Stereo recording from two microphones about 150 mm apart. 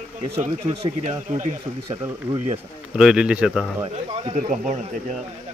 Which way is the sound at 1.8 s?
25° right (ahead or behind).